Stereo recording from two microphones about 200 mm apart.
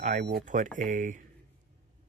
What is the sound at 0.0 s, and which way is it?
Speech, 45° right (ahead or behind).